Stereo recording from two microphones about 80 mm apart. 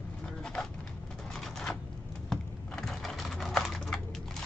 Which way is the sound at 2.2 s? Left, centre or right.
Centre.